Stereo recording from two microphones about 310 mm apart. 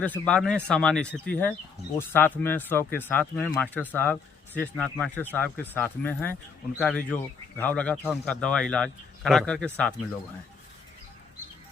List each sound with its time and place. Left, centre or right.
0.0 s speech: centre